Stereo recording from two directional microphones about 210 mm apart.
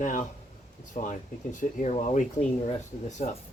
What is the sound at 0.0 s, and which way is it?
Speech, 40° left (ahead or behind).